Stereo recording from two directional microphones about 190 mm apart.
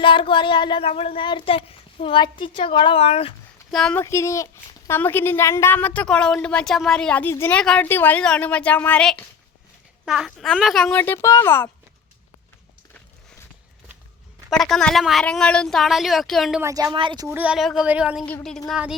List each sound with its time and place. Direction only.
0.0 s child singing: 25° left (ahead or behind)
3.7 s speech: centre (ahead or behind)
4.0 s a woman's voice: 15° left (ahead or behind)
14.5 s speech: 5° left (ahead or behind)
16.6 s speech: 15° right (ahead or behind)
16.9 s speech: 25° right (ahead or behind)
17.2 s speech: 5° right (ahead or behind)
18.3 s speech: 5° left (ahead or behind)